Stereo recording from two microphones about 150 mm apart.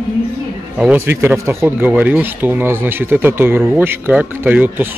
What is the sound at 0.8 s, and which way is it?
Speech, 10° right (ahead or behind).